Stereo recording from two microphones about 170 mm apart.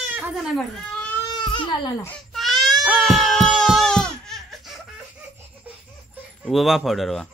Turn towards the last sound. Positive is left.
turn(degrees=0)  # may be behind; listen again after turning